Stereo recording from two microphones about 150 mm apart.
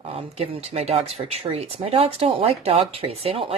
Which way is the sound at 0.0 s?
40° right (ahead or behind).